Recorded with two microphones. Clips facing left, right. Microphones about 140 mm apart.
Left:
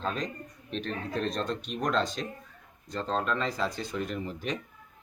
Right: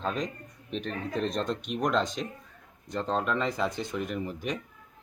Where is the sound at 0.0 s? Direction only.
10° right (ahead or behind).